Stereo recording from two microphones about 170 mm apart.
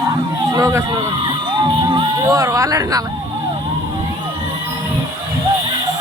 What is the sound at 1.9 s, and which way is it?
Speech, 20° right (ahead or behind).